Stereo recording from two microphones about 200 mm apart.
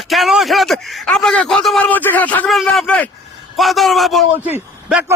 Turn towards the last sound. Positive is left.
turn(degrees=-10)  # may be behind; listen again after turning